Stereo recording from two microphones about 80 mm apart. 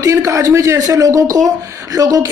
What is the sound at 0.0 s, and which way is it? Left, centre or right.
A woman's voice, right.